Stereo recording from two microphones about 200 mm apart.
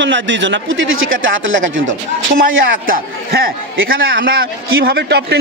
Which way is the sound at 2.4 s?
45° right (ahead or behind).